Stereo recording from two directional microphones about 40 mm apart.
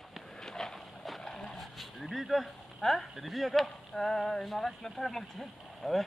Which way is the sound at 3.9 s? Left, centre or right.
Centre.